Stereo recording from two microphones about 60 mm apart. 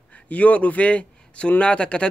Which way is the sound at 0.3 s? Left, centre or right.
Left.